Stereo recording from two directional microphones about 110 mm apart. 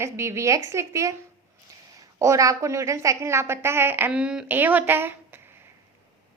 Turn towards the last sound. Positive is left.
turn(degrees=-20)  # may be behind; listen again after turning